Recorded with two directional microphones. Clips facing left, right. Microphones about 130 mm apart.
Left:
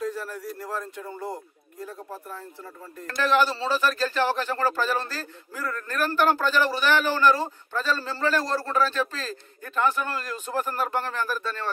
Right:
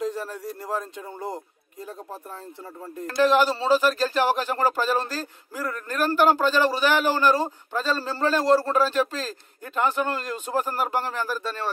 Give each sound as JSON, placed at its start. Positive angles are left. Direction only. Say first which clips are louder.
{"t": 0.0, "sound": "speech", "louder": "right 2 dB", "side_deg": -20}
{"t": 3.2, "sound": "speech", "louder": "right 3 dB", "side_deg": -15}